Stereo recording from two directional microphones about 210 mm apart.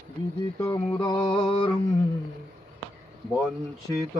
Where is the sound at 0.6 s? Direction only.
15° left (ahead or behind).